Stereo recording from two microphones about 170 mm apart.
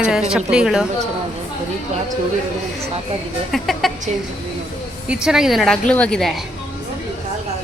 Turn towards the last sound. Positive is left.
turn(degrees=5)  # may be behind; listen again after turning